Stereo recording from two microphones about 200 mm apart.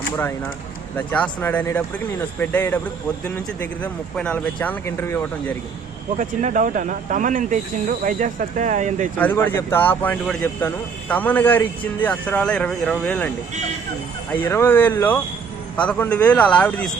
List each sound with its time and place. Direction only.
0.9 s speech: 5° left (ahead or behind)
6.1 s speech: 40° right (ahead or behind)
9.1 s speech: 10° left (ahead or behind)
14.4 s a man's voice: 10° left (ahead or behind)